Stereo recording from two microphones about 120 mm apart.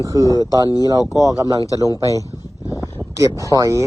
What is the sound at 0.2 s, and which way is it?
A man's voice, 30° left (ahead or behind).